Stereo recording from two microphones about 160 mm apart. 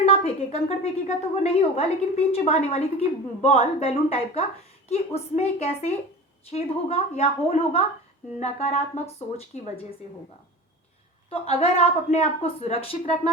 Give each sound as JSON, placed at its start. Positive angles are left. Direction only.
{"t": 0.0, "sound": "a woman's voice", "side_deg": 35}
{"t": 8.4, "sound": "a sound", "side_deg": 45}
{"t": 11.3, "sound": "a woman's voice", "side_deg": 40}